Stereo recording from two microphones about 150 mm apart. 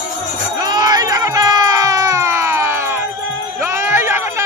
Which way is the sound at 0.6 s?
25° right (ahead or behind).